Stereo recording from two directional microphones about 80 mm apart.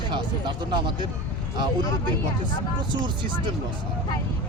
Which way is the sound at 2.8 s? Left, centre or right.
Right.